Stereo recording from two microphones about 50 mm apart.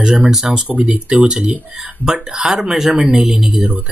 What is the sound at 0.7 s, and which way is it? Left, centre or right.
Speech, right.